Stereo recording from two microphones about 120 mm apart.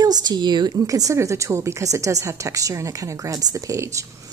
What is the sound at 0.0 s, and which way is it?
A woman's voice, 35° right (ahead or behind).